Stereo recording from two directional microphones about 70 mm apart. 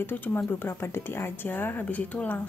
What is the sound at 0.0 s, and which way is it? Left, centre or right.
Speech, left.